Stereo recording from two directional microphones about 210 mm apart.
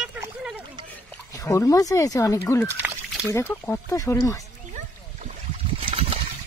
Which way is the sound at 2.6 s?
5° right (ahead or behind).